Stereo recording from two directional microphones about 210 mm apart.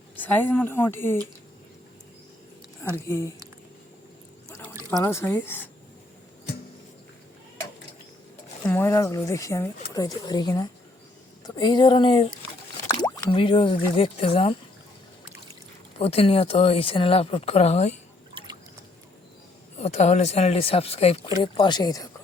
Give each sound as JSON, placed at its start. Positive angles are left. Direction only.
{"t": 0.2, "sound": "speech", "side_deg": 10}
{"t": 3.1, "sound": "speech", "side_deg": 15}
{"t": 4.6, "sound": "pour", "side_deg": -10}
{"t": 5.0, "sound": "speech", "side_deg": 10}
{"t": 8.6, "sound": "speech", "side_deg": 10}
{"t": 13.3, "sound": "speech", "side_deg": 25}
{"t": 16.0, "sound": "speech", "side_deg": 30}
{"t": 19.8, "sound": "speech", "side_deg": 30}